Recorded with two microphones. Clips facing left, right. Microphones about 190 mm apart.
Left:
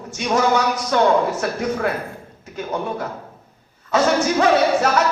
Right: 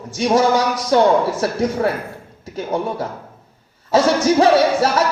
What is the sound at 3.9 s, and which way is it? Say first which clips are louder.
Speech: right 3 dB; 35° right (ahead or behind).